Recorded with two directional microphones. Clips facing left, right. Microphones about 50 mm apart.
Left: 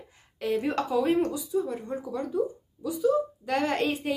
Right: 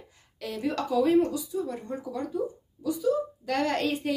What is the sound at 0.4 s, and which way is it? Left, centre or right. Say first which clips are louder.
Speech: left 3 dB; left.